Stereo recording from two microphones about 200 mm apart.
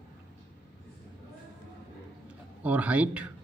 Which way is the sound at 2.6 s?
5° right (ahead or behind).